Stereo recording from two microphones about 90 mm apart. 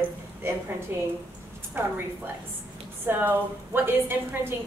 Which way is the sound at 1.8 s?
25° right (ahead or behind).